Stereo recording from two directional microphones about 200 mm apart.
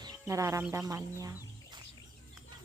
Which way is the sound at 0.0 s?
15° right (ahead or behind).